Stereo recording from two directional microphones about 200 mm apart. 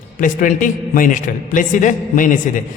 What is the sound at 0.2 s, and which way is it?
A man's voice, 40° left (ahead or behind).